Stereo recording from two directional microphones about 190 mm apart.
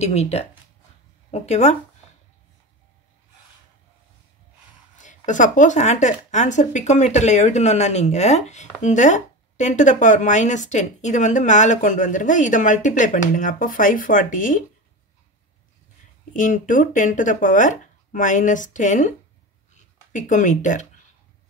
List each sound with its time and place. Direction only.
0.0 s speech: 35° left (ahead or behind)
5.0 s speech: 40° left (ahead or behind)
16.3 s speech: 40° left (ahead or behind)